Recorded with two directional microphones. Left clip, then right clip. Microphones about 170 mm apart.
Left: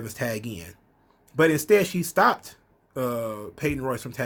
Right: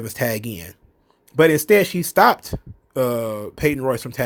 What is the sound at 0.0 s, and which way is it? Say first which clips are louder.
Speech: right 6 dB; 50° right (ahead or behind).